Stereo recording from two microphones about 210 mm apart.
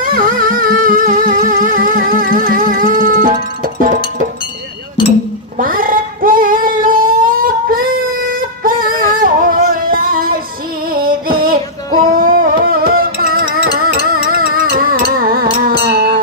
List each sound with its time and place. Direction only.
0.0 s music: 40° right (ahead or behind)
5.6 s child singing: 40° right (ahead or behind)
10.9 s music: 45° right (ahead or behind)